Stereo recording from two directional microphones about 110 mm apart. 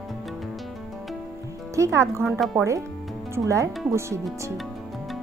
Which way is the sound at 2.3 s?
Centre (ahead or behind).